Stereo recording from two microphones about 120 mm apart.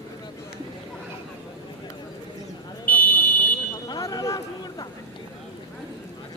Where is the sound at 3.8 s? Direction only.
30° left (ahead or behind).